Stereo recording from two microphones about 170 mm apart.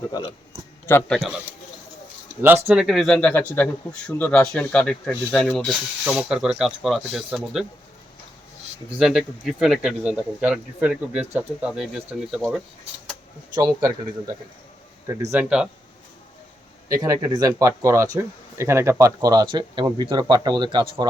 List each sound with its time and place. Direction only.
0.1 s a man's voice: 25° left (ahead or behind)
0.9 s speech: 10° left (ahead or behind)
2.4 s speech: 15° right (ahead or behind)
2.8 s speech: centre (ahead or behind)
9.0 s speech: 5° right (ahead or behind)
13.6 s speech: 20° right (ahead or behind)
16.9 s speech: 20° right (ahead or behind)